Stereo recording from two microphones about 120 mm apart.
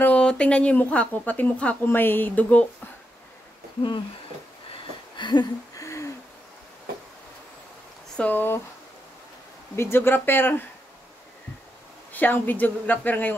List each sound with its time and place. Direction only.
0.0 s speech: 10° left (ahead or behind)
5.1 s a sound: 40° left (ahead or behind)
8.2 s speech: 15° left (ahead or behind)
9.8 s speech: 20° left (ahead or behind)
12.1 s speech: 15° left (ahead or behind)